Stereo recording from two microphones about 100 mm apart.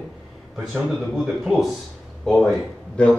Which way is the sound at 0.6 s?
5° right (ahead or behind).